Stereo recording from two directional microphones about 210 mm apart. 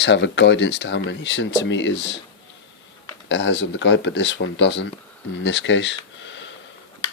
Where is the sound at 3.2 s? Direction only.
60° left (ahead or behind).